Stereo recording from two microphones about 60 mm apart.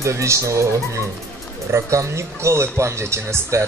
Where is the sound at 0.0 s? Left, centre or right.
Right.